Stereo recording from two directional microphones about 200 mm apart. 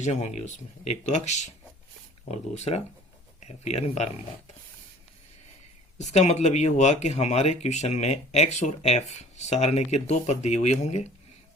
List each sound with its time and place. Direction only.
0.0 s speech: 35° left (ahead or behind)
6.0 s speech: 35° left (ahead or behind)